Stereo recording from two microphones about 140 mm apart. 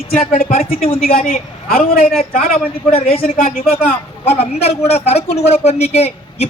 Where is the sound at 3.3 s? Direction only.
90° left.